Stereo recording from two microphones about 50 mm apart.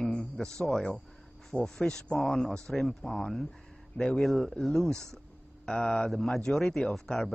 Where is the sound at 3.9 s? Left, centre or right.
Centre.